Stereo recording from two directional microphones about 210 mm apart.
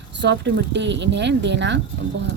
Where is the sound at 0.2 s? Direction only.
55° right (ahead or behind).